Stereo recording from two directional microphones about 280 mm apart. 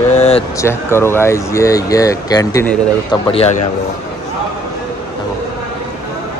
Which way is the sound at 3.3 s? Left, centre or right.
Left.